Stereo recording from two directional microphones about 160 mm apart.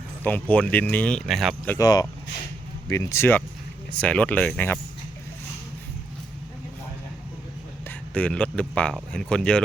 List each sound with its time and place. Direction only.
0.3 s speech: 10° left (ahead or behind)
1.8 s speech: 25° left (ahead or behind)
7.9 s speech: 10° left (ahead or behind)